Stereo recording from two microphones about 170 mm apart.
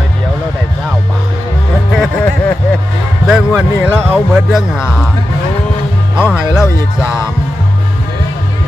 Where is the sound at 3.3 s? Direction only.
5° right (ahead or behind).